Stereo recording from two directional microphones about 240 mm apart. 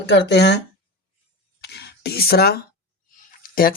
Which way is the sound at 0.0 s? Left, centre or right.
Left.